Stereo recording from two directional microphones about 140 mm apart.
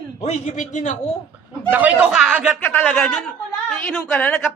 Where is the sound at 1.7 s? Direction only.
10° right (ahead or behind).